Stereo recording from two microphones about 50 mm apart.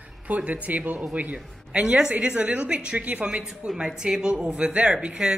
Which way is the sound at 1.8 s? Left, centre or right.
Centre.